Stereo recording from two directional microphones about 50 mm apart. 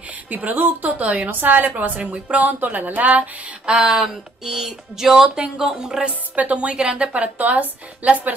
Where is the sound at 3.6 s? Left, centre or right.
Centre.